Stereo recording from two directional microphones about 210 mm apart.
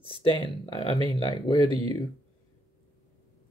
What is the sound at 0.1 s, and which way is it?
Speech, 25° left (ahead or behind).